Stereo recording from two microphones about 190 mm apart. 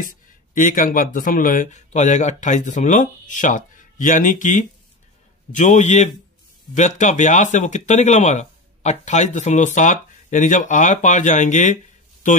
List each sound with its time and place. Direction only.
0.6 s speech: 45° left (ahead or behind)